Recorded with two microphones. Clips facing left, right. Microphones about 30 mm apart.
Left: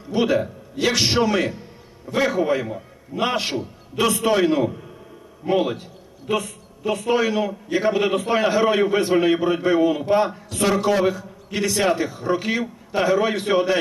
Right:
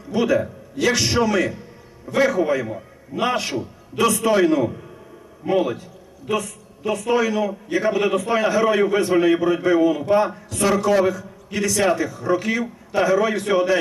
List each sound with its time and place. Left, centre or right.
0.1 s a man's voice: left
7.0 s a man's voice: left